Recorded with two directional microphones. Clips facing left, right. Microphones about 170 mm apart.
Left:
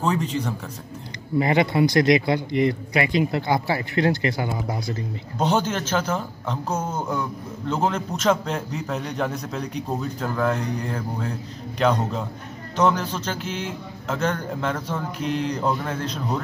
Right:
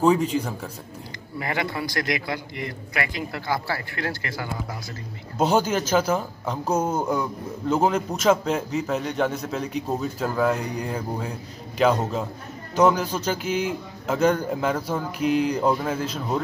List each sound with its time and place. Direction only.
0.0 s speech: 10° right (ahead or behind)
1.4 s a man's voice: 20° left (ahead or behind)
5.4 s a man's voice: 10° right (ahead or behind)